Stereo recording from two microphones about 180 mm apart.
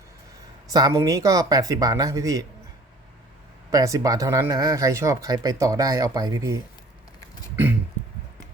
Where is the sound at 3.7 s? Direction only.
20° right (ahead or behind).